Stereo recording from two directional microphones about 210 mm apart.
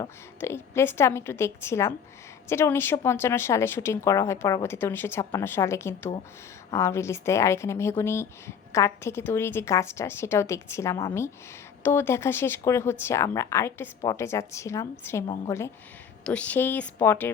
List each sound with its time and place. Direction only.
0.0 s a woman's voice: 10° left (ahead or behind)